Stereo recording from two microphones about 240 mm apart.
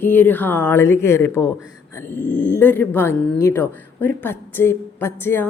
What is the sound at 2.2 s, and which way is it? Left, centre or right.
Speech, left.